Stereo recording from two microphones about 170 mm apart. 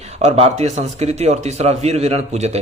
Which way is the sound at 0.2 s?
40° right (ahead or behind).